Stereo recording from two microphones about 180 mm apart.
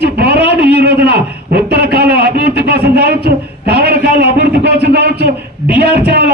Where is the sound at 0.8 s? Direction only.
65° right (ahead or behind).